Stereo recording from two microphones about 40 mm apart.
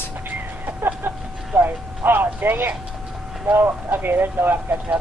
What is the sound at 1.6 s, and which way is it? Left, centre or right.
Music, right.